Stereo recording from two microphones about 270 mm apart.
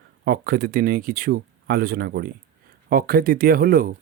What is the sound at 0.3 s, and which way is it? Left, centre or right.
Speech, right.